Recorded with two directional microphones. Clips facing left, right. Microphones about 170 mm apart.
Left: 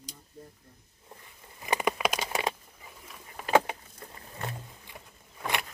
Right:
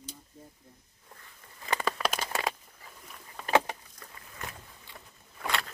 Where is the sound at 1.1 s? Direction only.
20° left (ahead or behind).